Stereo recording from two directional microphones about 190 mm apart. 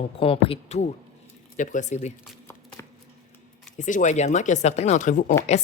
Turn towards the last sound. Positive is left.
turn(degrees=40)  # may be behind; listen again after turning